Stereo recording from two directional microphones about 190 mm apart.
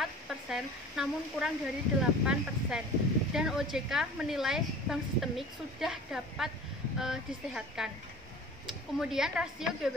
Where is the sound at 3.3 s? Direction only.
Centre (ahead or behind).